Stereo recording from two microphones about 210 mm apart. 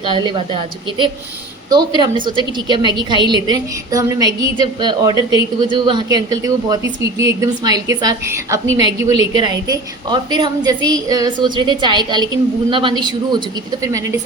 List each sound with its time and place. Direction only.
0.0 s a woman's voice: 25° right (ahead or behind)
2.6 s a woman's voice: 20° right (ahead or behind)